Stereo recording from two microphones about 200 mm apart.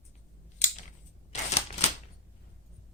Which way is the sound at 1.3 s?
35° left (ahead or behind).